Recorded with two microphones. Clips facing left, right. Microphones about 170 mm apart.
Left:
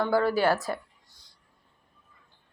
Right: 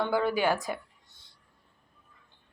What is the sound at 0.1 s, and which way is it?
Speech, 15° right (ahead or behind).